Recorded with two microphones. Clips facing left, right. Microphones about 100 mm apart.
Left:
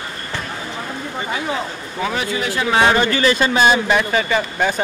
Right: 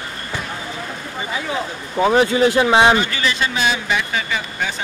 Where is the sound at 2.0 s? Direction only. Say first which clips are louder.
Right 8 dB; 30° right (ahead or behind).